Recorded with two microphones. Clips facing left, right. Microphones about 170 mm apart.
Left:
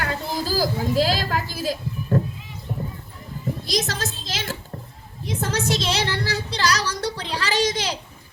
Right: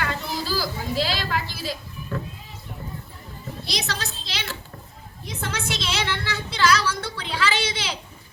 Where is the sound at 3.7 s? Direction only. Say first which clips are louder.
Left 4 dB; 45° left (ahead or behind).